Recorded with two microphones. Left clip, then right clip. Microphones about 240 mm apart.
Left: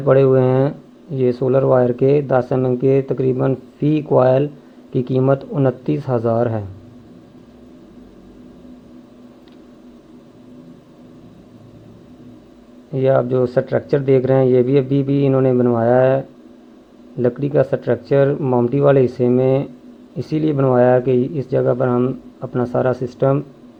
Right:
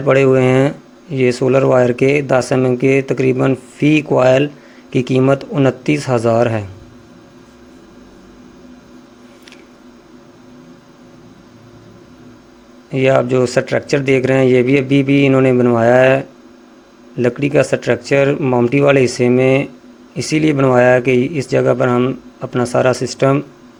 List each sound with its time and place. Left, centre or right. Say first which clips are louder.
0.0 s speech: right 2 dB; right
12.9 s speech: right 3 dB; right
21.8 s speech: right 3 dB; right
22.4 s speech: right 4 dB; right
23.0 s speech: right 3 dB; right